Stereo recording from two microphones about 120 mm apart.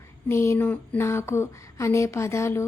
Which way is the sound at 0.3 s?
20° left (ahead or behind).